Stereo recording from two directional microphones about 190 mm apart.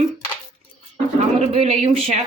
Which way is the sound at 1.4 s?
30° right (ahead or behind).